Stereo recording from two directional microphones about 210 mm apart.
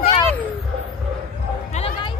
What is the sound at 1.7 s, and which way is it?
Music, 30° left (ahead or behind).